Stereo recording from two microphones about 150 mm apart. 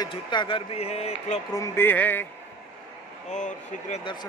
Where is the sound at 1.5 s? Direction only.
15° left (ahead or behind).